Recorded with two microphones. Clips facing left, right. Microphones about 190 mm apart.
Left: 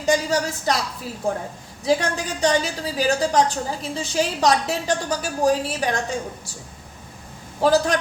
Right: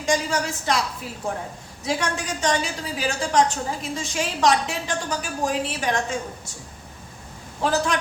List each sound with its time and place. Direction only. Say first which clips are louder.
0.0 s a woman's voice: left 3 dB; 35° left (ahead or behind)
1.8 s a woman's voice: left 5 dB; 35° left (ahead or behind)
7.6 s a woman's voice: left 5 dB; 35° left (ahead or behind)